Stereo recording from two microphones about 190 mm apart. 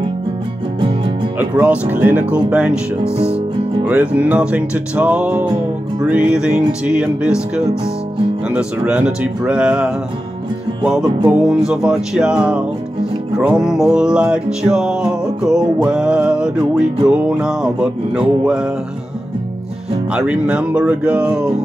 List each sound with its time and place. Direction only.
0.7 s music: 25° right (ahead or behind)
1.4 s music: 10° right (ahead or behind)
3.0 s speech: 30° right (ahead or behind)
3.8 s music: 10° right (ahead or behind)
20.2 s music: 5° right (ahead or behind)